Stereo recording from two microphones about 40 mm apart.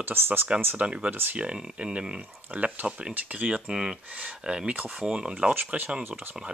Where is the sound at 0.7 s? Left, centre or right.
Right.